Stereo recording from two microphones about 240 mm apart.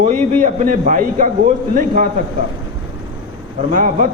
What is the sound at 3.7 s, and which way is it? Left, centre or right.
Speech, right.